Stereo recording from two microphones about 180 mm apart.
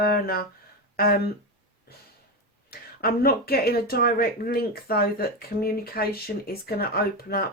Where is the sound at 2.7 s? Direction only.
55° left (ahead or behind).